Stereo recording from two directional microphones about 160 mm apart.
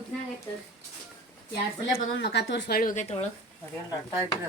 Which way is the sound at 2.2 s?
90° left.